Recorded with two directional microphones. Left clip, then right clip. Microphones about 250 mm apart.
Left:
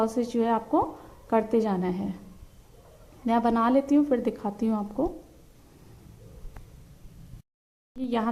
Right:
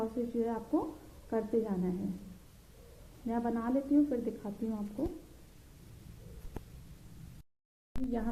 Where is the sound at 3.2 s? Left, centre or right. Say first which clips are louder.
Left 12 dB; left.